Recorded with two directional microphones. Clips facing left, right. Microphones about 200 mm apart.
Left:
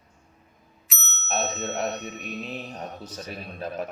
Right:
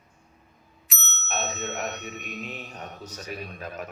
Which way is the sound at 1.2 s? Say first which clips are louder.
Left 3 dB; 35° left (ahead or behind).